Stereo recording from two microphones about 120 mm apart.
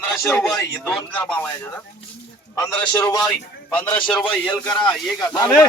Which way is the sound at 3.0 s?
30° left (ahead or behind).